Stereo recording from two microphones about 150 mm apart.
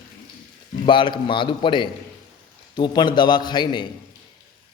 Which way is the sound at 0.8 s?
30° left (ahead or behind).